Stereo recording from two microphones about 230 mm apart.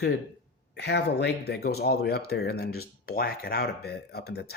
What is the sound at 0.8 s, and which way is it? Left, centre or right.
Speech, left.